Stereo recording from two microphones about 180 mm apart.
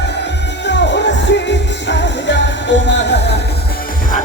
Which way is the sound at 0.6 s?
75° left (ahead or behind).